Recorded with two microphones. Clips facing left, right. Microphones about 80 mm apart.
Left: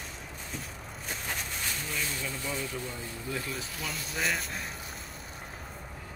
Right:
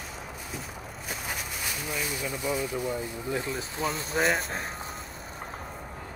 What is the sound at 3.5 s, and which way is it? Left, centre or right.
Speech, right.